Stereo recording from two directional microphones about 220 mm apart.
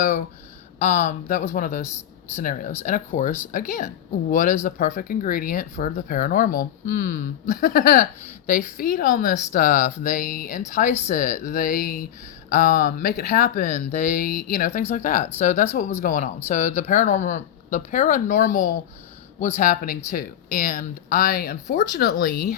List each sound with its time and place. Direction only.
0.8 s speech: 30° left (ahead or behind)